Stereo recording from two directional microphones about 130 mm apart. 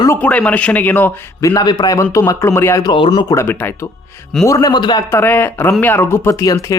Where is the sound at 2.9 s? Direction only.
35° left (ahead or behind).